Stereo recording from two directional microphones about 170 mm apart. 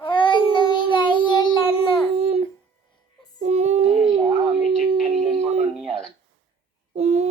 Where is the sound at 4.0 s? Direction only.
30° right (ahead or behind).